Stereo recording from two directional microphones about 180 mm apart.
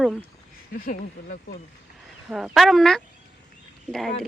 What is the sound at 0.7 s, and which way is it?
Speech, 55° left (ahead or behind).